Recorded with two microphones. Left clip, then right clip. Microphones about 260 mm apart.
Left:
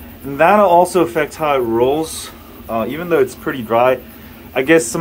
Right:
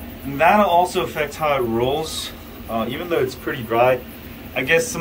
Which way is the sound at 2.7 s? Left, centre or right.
Left.